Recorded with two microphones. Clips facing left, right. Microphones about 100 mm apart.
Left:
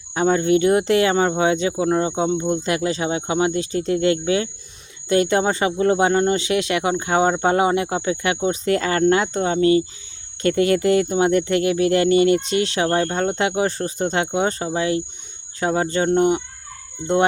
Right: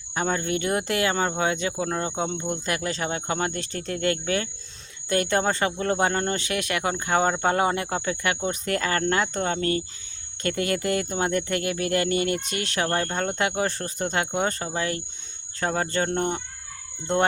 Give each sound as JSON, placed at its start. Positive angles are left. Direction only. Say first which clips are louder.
{"t": 0.1, "sound": "speech", "louder": "left 9 dB", "side_deg": 25}